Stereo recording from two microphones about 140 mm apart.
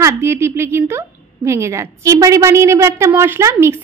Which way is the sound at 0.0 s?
20° right (ahead or behind).